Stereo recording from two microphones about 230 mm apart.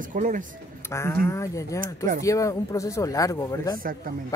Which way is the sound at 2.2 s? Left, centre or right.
Centre.